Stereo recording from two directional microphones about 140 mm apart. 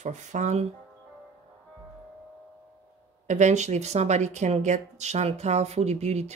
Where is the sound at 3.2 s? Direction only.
60° right (ahead or behind).